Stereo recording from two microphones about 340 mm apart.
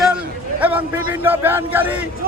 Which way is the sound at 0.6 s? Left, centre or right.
Centre.